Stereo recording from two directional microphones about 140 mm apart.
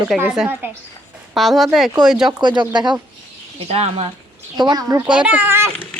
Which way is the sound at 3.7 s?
45° right (ahead or behind).